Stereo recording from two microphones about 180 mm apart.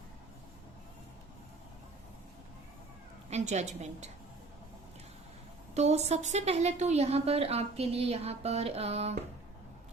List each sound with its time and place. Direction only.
3.2 s a woman's voice: 40° right (ahead or behind)
5.7 s a woman's voice: 40° right (ahead or behind)